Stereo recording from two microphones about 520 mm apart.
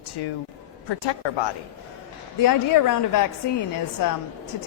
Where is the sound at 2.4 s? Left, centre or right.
Left.